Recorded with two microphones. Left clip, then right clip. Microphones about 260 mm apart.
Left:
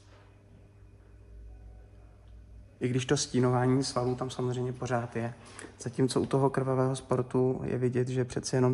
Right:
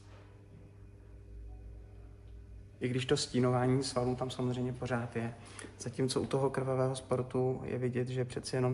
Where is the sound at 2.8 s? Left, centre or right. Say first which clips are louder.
Left 3 dB; left.